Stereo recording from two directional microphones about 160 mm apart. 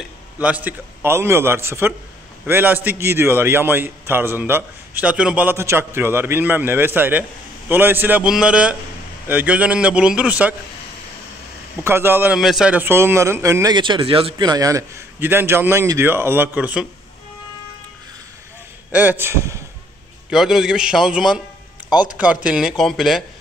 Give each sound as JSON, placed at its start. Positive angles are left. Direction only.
{"t": 0.4, "sound": "a man's voice", "side_deg": -10}
{"t": 11.8, "sound": "a man's voice", "side_deg": -15}
{"t": 12.4, "sound": "a man's voice", "side_deg": 0}
{"t": 18.9, "sound": "a man's voice", "side_deg": -10}
{"t": 20.2, "sound": "speech", "side_deg": -5}